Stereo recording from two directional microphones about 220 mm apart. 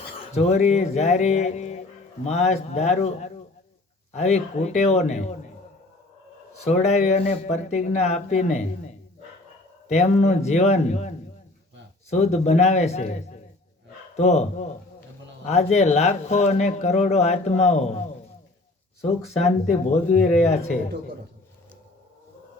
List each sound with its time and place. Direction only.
0.3 s speech: 30° left (ahead or behind)
6.7 s speech: 30° left (ahead or behind)
12.1 s speech: 30° left (ahead or behind)
19.0 s speech: 30° left (ahead or behind)